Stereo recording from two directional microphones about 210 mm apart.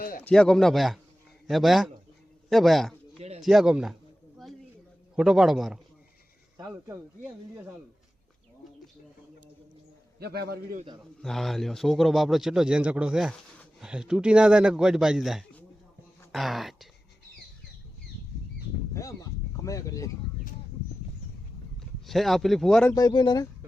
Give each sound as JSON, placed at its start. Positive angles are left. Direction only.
{"t": 0.3, "sound": "a man's voice", "side_deg": 5}
{"t": 3.2, "sound": "bird", "side_deg": -30}
{"t": 3.4, "sound": "a man's voice", "side_deg": 0}
{"t": 5.1, "sound": "a man's voice", "side_deg": 0}
{"t": 10.2, "sound": "a man's voice", "side_deg": -50}
{"t": 11.2, "sound": "a man's voice", "side_deg": 0}
{"t": 19.5, "sound": "speech", "side_deg": 15}
{"t": 21.8, "sound": "speech", "side_deg": 0}
{"t": 23.0, "sound": "speech", "side_deg": 20}